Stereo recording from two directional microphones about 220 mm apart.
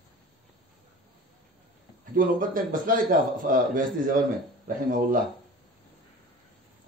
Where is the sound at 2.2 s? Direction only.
40° right (ahead or behind).